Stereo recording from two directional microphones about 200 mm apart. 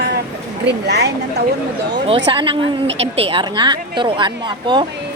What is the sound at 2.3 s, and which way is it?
A woman's voice, 25° right (ahead or behind).